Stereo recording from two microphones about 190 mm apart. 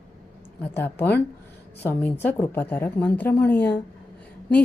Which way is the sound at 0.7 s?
10° left (ahead or behind).